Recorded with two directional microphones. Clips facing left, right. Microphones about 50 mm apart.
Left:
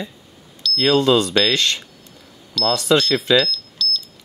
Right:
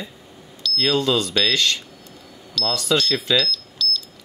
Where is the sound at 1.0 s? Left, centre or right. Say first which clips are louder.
Left 5 dB; left.